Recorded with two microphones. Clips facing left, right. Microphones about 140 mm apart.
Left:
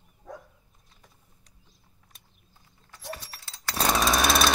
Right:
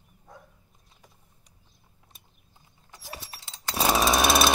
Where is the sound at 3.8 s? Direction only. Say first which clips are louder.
Right 2 dB; 5° right (ahead or behind).